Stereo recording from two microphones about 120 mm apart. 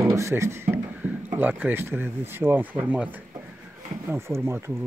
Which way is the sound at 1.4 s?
15° right (ahead or behind).